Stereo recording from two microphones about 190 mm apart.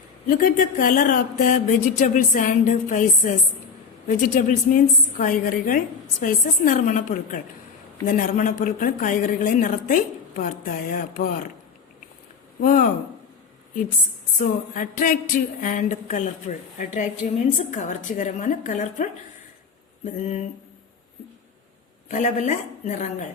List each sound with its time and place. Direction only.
0.3 s a woman's voice: 50° left (ahead or behind)
12.6 s a woman's voice: 45° left (ahead or behind)
14.3 s a woman's voice: 45° left (ahead or behind)
22.1 s a woman's voice: 40° left (ahead or behind)